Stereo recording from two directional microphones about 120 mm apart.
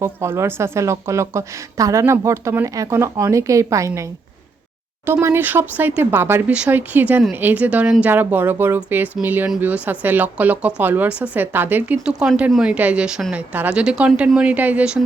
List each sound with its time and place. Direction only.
0.0 s a woman's voice: 20° right (ahead or behind)
5.0 s speech: 20° right (ahead or behind)